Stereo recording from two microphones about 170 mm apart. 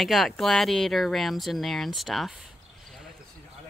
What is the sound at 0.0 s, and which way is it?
Speech, centre (ahead or behind).